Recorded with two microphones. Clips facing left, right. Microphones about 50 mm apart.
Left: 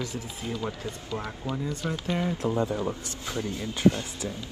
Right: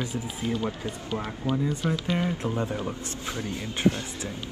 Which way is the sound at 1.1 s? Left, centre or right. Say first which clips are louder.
Right 1 dB; centre.